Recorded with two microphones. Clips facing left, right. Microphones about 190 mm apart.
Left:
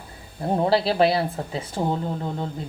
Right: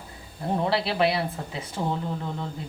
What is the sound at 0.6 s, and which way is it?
A man's voice, 35° left (ahead or behind).